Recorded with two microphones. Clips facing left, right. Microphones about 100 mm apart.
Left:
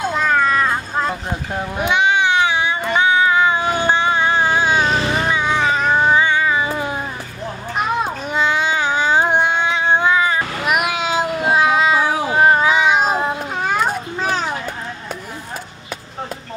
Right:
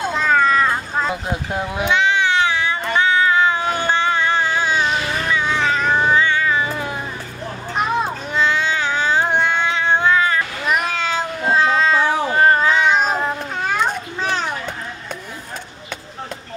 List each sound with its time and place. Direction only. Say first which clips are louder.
0.1 s cat: right 2 dB; 5° left (ahead or behind)
1.8 s cat: left 2 dB; 15° left (ahead or behind)
4.7 s insect: left 2 dB; 40° left (ahead or behind)
5.0 s cat: left 2 dB; 20° left (ahead or behind)
8.0 s a sound: left 1 dB; 15° left (ahead or behind)